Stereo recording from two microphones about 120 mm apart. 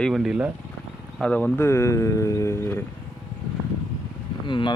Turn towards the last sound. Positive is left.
turn(degrees=40)  # may be behind; listen again after turning